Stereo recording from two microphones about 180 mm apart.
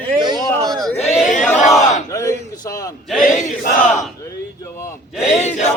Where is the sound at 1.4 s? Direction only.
Centre (ahead or behind).